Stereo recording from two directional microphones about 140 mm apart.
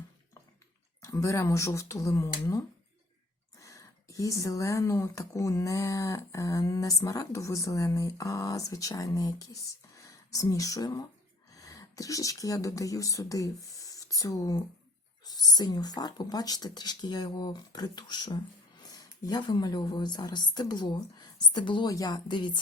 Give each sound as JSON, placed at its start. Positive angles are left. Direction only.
{"t": 1.0, "sound": "speech", "side_deg": 20}